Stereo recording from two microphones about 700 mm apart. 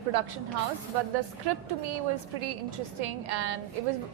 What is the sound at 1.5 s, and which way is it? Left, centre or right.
A woman's voice, right.